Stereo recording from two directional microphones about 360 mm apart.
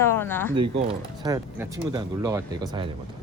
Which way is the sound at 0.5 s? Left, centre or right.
Centre.